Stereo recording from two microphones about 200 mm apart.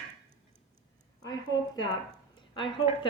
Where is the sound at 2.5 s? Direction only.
25° left (ahead or behind).